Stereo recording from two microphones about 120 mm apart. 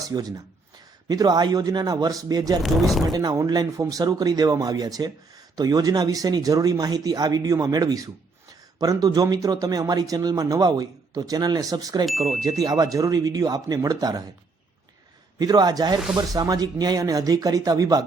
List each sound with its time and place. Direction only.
0.1 s speech: 35° right (ahead or behind)
2.6 s speech: centre (ahead or behind)
3.1 s speech: 30° right (ahead or behind)
15.4 s speech: 35° right (ahead or behind)